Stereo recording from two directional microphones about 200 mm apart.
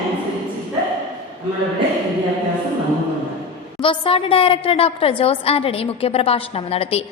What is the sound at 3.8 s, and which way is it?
A woman's voice, 25° left (ahead or behind).